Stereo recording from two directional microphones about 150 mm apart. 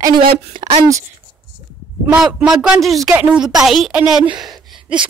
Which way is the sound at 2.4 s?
5° right (ahead or behind).